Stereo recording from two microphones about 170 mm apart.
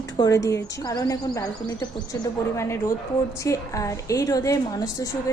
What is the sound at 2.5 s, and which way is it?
A woman's voice, 15° left (ahead or behind).